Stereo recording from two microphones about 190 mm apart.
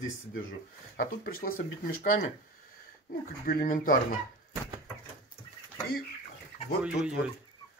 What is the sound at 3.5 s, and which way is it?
Speech, 50° left (ahead or behind).